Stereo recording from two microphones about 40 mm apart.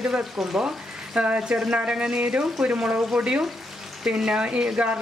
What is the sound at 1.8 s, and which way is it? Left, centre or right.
A man's voice, right.